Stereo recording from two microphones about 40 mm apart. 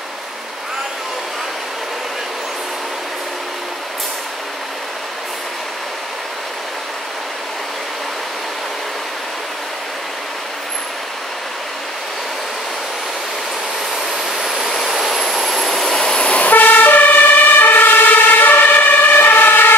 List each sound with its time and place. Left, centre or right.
14.4 s vehicle: centre
16.0 s vehicle: left
16.5 s emergency vehicle: left